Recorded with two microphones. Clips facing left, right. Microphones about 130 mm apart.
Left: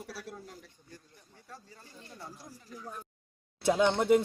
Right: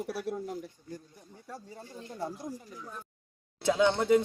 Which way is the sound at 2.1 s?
55° right (ahead or behind).